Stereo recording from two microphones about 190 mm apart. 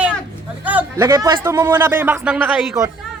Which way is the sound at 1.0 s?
20° right (ahead or behind).